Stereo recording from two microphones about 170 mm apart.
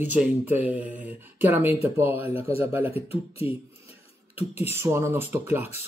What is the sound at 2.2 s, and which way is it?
Speech, 35° left (ahead or behind).